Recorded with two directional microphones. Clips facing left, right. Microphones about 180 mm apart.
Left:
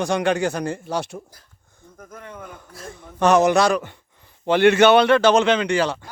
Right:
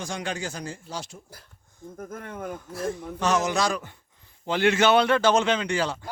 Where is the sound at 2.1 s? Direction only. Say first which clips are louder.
Right 2 dB; 50° right (ahead or behind).